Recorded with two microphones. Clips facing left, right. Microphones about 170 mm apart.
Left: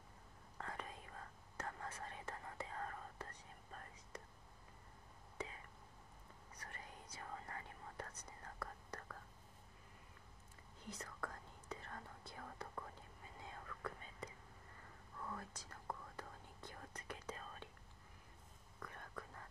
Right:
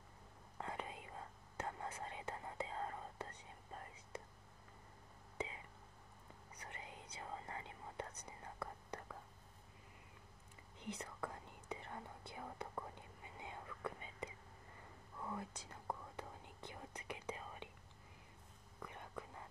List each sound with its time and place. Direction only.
0.6 s whispering: 20° right (ahead or behind)
6.7 s whispering: 20° right (ahead or behind)
11.0 s whispering: 20° right (ahead or behind)
18.8 s whispering: 15° right (ahead or behind)